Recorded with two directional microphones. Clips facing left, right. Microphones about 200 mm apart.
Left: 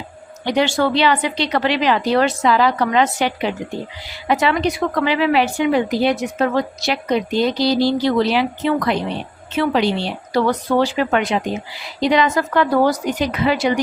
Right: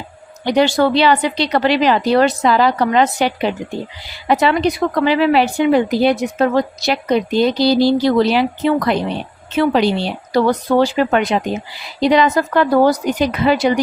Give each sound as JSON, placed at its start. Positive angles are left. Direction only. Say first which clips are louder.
{"t": 0.4, "sound": "speech", "louder": "right 4 dB", "side_deg": -35}